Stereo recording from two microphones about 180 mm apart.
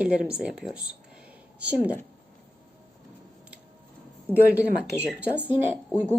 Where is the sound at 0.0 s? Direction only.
5° right (ahead or behind).